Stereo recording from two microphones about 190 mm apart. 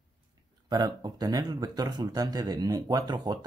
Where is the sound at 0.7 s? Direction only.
20° right (ahead or behind).